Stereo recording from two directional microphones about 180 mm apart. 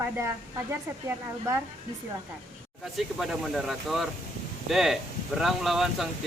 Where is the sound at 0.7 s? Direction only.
15° right (ahead or behind).